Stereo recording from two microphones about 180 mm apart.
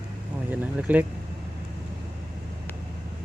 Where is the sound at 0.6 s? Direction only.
10° right (ahead or behind).